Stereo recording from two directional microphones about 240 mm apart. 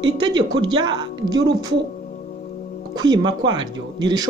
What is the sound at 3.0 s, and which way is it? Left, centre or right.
Speech, centre.